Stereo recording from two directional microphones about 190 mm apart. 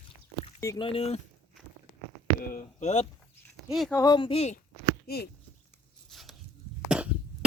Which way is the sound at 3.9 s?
20° left (ahead or behind).